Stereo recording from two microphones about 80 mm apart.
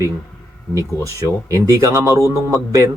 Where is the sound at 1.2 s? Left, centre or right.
Right.